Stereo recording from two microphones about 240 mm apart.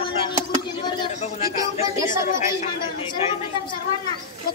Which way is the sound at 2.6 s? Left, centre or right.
Left.